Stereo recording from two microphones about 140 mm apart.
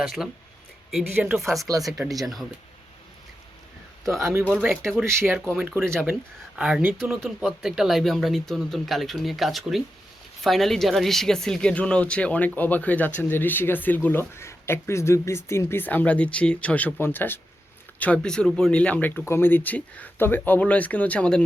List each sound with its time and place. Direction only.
0.0 s speech: centre (ahead or behind)
4.0 s a man's voice: centre (ahead or behind)
5.0 s speech: 20° right (ahead or behind)
6.6 s speech: 5° right (ahead or behind)